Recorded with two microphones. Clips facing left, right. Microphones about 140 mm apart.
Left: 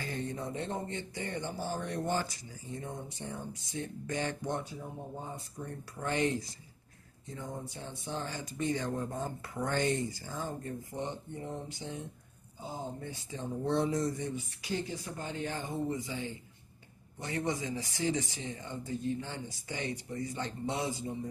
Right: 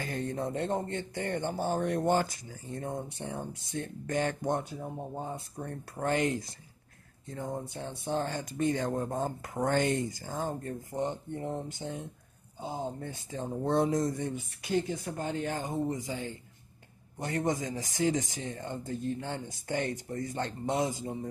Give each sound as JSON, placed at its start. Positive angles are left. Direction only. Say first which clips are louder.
{"t": 0.0, "sound": "speech", "louder": "right 4 dB", "side_deg": -50}
{"t": 13.0, "sound": "speech", "louder": "right 3 dB", "side_deg": -45}
{"t": 21.0, "sound": "mantra", "louder": "right 1 dB", "side_deg": -40}